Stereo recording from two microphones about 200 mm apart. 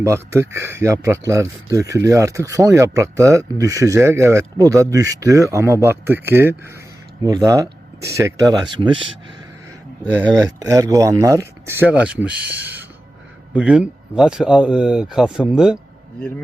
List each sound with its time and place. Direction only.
0.0 s speech: 15° right (ahead or behind)
10.3 s speech: 15° right (ahead or behind)